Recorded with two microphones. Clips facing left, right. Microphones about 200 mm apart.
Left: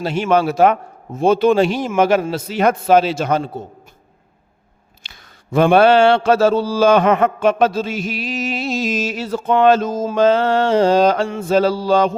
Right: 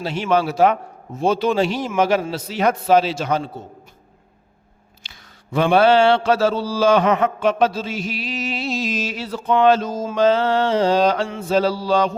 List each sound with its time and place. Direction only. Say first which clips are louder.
0.0 s mantra: left 3 dB; 50° left (ahead or behind)
5.0 s mantra: left 3 dB; 45° left (ahead or behind)